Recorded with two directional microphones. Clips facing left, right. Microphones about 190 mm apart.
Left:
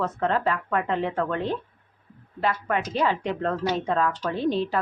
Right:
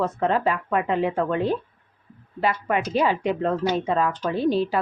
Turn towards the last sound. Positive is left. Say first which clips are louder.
# right 3 dB
turn(degrees=-5)  # may be behind; listen again after turning